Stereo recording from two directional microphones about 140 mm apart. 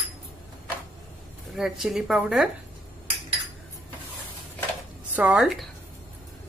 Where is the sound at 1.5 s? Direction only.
5° right (ahead or behind).